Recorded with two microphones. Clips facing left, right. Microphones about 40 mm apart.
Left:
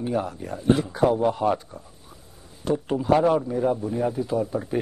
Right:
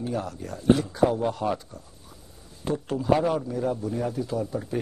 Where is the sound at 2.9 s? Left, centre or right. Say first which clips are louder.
Left 3 dB; left.